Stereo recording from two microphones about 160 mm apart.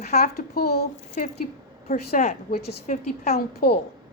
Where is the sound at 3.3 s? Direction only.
80° left.